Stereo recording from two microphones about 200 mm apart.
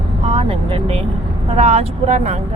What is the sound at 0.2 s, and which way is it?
Vehicle, 30° right (ahead or behind).